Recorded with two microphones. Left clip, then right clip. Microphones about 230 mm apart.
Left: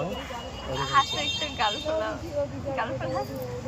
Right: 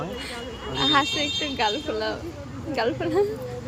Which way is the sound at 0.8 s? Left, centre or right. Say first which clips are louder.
Right 3 dB; right.